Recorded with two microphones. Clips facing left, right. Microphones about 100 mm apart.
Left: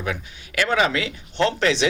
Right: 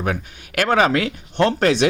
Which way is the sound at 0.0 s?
50° right (ahead or behind).